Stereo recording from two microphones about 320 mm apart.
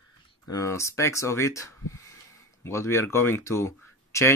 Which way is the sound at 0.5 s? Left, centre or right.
Centre.